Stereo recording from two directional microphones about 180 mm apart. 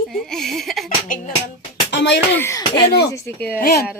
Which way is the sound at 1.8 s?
80° left.